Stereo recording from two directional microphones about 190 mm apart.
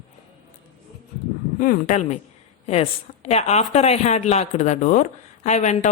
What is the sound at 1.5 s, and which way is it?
Speech, 45° left (ahead or behind).